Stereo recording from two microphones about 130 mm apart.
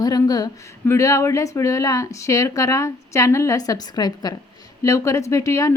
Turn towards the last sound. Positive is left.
turn(degrees=25)  # may be behind; listen again after turning